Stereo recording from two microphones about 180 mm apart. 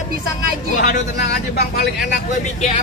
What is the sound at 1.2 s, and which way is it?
Speech, 60° left (ahead or behind).